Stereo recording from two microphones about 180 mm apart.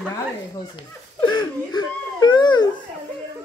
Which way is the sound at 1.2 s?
25° left (ahead or behind).